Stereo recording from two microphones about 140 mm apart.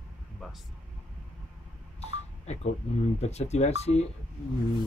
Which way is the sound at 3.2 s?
50° left (ahead or behind).